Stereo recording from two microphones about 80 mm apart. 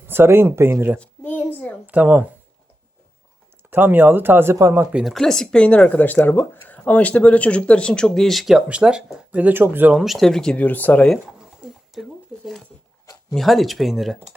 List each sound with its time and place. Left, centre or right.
0.0 s speech: right
0.9 s a sound: centre
1.9 s speech: centre
3.7 s speech: right
5.0 s speech: centre; by 9.9 s right
9.9 s speech: centre
10.6 s speech: left
11.6 s a sound: centre
13.3 s speech: centre